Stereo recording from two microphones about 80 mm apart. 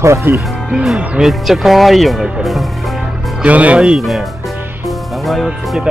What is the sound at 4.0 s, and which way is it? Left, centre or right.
Speech, centre.